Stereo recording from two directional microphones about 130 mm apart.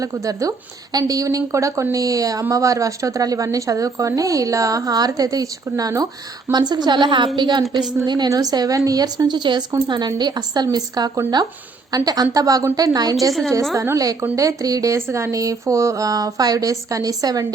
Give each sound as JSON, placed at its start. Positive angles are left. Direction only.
{"t": 0.0, "sound": "a woman's voice", "side_deg": -25}